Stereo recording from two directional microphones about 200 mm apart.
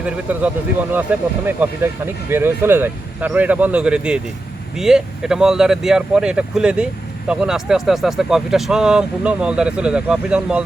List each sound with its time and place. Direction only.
0.0 s speech: 5° right (ahead or behind)